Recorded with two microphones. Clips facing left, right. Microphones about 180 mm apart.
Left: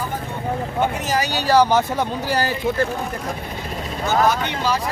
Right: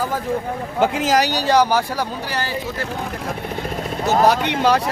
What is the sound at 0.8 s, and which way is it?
Speech, 90° right.